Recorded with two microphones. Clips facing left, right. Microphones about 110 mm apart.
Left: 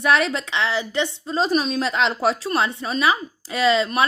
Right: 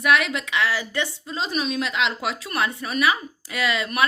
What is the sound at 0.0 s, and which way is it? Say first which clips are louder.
A woman's voice: left 2 dB; 35° left (ahead or behind).